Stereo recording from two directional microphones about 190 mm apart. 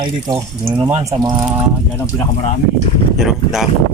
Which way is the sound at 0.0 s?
25° right (ahead or behind).